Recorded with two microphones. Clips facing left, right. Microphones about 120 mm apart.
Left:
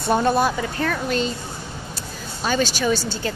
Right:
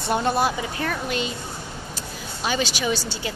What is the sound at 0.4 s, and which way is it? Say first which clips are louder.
Speech: left 2 dB; 15° right (ahead or behind).